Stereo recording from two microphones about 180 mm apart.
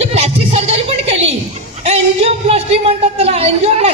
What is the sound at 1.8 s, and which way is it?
A woman's voice, 35° right (ahead or behind).